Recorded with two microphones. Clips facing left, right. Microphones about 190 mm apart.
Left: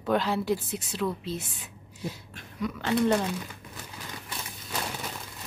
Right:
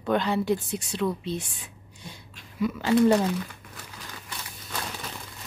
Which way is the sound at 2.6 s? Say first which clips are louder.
Right 5 dB; 5° right (ahead or behind).